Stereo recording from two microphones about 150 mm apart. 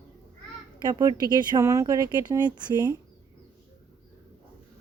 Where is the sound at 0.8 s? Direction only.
25° right (ahead or behind).